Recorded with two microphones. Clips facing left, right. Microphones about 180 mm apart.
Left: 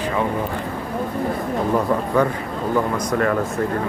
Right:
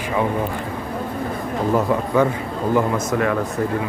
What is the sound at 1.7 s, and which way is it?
Speech, 5° right (ahead or behind).